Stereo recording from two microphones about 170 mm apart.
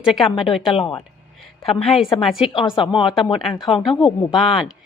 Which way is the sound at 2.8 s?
30° left (ahead or behind).